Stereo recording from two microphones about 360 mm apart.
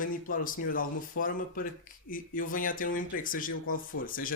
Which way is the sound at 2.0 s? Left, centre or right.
Left.